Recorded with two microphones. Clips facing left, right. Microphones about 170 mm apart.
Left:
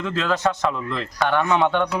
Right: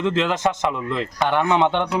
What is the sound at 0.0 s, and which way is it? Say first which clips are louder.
A man's voice: right 2 dB; 20° right (ahead or behind).